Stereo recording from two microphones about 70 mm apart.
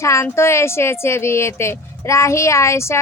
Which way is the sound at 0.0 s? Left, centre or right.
Left.